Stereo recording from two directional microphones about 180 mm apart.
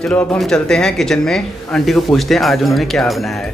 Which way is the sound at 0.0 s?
5° left (ahead or behind).